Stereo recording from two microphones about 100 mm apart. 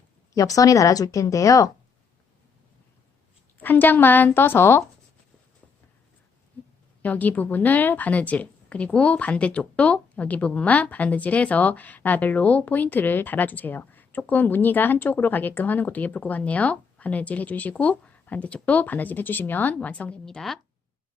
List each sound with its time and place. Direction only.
0.3 s speech: 35° left (ahead or behind)
3.6 s a woman's voice: 20° left (ahead or behind)
7.0 s a woman's voice: 15° left (ahead or behind)